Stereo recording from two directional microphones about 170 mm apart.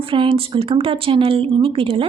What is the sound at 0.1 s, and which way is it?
A woman's voice, 30° right (ahead or behind).